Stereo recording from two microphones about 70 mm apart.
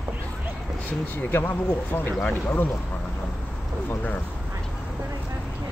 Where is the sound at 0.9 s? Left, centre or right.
Left.